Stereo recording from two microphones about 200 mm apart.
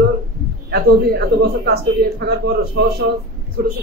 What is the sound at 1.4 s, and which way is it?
A woman's voice, 50° right (ahead or behind).